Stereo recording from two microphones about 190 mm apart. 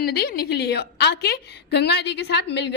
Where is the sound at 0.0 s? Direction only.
55° left (ahead or behind).